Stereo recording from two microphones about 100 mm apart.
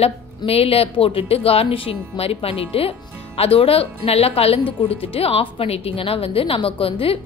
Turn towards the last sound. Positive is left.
turn(degrees=70)  # may be behind; listen again after turning